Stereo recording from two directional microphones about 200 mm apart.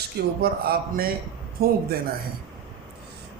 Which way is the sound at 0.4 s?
50° right (ahead or behind).